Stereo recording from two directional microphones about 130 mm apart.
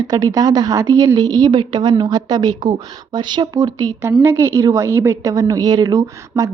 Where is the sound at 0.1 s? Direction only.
30° right (ahead or behind).